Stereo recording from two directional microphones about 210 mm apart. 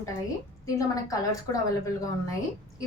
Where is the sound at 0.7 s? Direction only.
15° left (ahead or behind).